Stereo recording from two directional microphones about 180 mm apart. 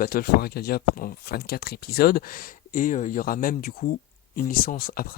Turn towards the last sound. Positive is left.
turn(degrees=55)  # may be behind; listen again after turning